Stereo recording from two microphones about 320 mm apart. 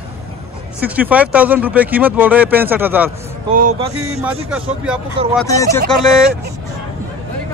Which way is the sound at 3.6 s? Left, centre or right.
Right.